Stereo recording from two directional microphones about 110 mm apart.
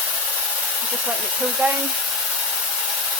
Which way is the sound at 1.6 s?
15° right (ahead or behind).